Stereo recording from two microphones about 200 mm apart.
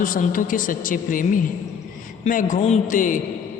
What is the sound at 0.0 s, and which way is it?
A man's voice, 40° left (ahead or behind).